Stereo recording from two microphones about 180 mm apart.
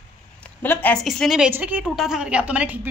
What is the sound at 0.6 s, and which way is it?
Speech, 10° left (ahead or behind).